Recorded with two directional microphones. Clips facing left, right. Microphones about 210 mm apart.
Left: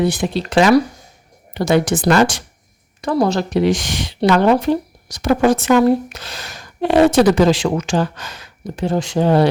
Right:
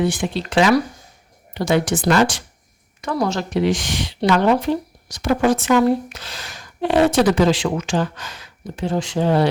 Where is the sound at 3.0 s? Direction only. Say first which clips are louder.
Left 5 dB; 35° left (ahead or behind).